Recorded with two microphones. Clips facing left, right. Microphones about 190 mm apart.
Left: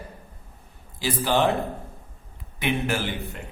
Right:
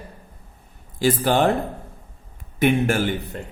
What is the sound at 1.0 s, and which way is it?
Speech, 50° right (ahead or behind).